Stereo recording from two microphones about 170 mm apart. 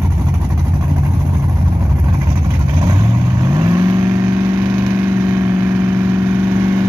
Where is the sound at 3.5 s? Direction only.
20° right (ahead or behind).